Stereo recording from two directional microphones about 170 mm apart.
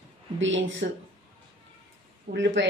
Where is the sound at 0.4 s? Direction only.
90° right.